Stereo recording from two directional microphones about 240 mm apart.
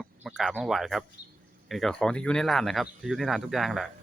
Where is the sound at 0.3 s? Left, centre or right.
Centre.